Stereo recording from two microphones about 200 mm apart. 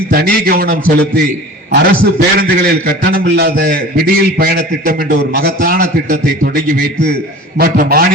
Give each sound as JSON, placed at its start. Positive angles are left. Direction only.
{"t": 0.1, "sound": "a man's voice", "side_deg": -50}